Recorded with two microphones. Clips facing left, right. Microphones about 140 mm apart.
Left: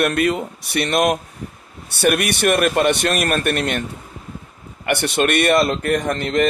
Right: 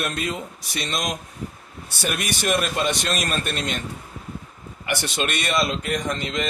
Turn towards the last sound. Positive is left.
turn(degrees=55)  # may be behind; listen again after turning